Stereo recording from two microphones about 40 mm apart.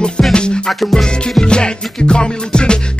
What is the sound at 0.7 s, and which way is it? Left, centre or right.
Music, centre.